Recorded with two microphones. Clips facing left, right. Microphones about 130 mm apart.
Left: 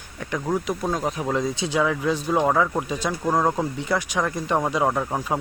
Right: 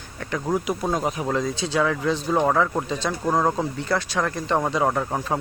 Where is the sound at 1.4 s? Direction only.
15° left (ahead or behind); by 3.7 s centre (ahead or behind).